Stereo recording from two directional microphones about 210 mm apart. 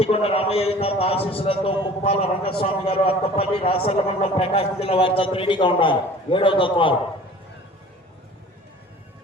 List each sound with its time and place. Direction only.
0.0 s a man's voice: 30° left (ahead or behind)